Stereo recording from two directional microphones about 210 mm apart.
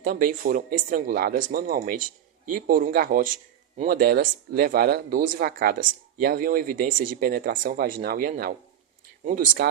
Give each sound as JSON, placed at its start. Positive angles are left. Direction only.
{"t": 0.0, "sound": "speech", "side_deg": -40}